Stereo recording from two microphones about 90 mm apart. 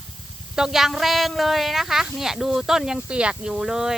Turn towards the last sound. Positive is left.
turn(degrees=-5)  # may be behind; listen again after turning